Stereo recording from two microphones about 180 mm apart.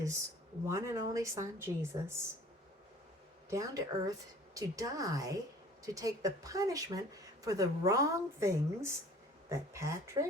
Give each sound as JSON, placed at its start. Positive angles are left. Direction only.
{"t": 0.7, "sound": "speech", "side_deg": -15}
{"t": 3.5, "sound": "speech", "side_deg": -20}